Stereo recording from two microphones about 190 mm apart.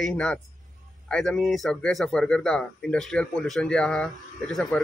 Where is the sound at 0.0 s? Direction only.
5° left (ahead or behind).